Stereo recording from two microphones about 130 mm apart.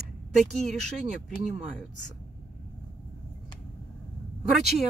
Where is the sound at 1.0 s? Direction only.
65° right (ahead or behind).